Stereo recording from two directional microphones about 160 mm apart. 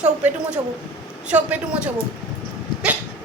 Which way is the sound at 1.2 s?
10° right (ahead or behind).